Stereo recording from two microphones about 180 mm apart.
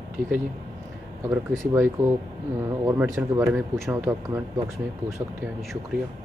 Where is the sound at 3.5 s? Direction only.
Centre (ahead or behind).